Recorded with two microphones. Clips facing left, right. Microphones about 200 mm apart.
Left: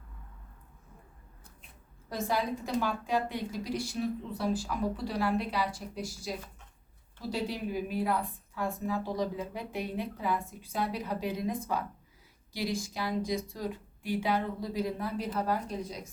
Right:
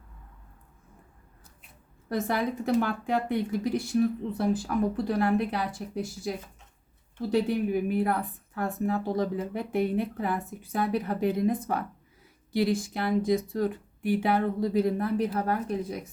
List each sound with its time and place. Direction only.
2.0 s a woman's voice: 60° right (ahead or behind)